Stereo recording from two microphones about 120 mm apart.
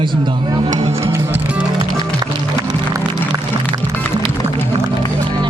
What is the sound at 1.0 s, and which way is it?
Music, 20° right (ahead or behind).